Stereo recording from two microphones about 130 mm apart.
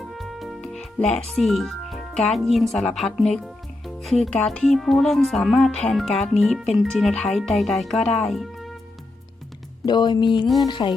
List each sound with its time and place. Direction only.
0.0 s music: centre (ahead or behind)
1.3 s speech: centre (ahead or behind)
9.8 s speech: 35° left (ahead or behind)